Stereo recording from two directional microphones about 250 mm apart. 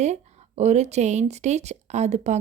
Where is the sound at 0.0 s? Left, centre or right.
Right.